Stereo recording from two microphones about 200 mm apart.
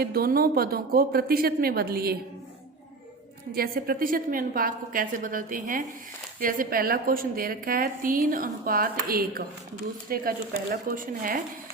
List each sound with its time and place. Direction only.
0.0 s a woman's voice: 50° right (ahead or behind)
3.5 s a woman's voice: 50° right (ahead or behind)